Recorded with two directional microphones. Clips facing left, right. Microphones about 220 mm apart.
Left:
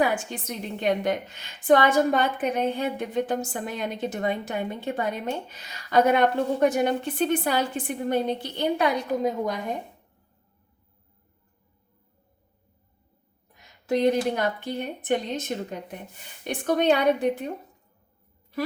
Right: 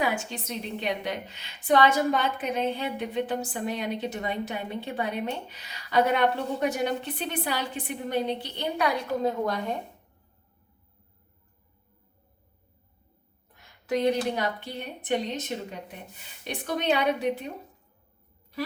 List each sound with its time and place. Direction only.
0.0 s a woman's voice: 50° left (ahead or behind)
8.8 s a woman's voice: 20° left (ahead or behind)
13.9 s a woman's voice: 45° left (ahead or behind)